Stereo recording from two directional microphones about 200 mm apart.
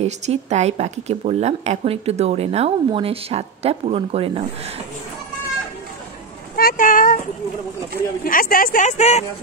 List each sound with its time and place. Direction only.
0.0 s speech: 35° right (ahead or behind)
6.5 s a sound: 45° left (ahead or behind)
8.2 s speech: 45° left (ahead or behind)